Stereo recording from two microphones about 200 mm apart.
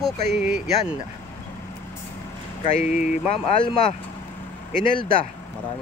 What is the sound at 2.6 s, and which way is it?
Speech, 35° left (ahead or behind).